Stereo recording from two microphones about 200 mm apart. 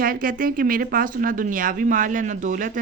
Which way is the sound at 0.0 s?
45° right (ahead or behind).